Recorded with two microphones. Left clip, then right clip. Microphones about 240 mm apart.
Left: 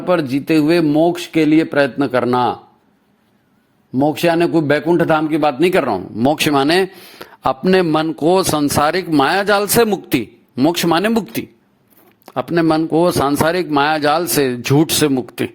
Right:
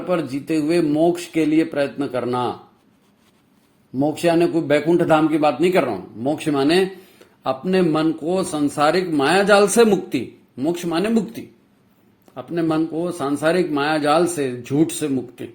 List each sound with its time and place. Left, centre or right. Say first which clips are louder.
0.1 s speech: left 7 dB; left
4.0 s a man's voice: left 3 dB; left
12.2 s a man's voice: left 7 dB; left